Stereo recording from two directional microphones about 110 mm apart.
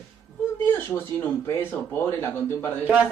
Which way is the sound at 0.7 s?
20° left (ahead or behind).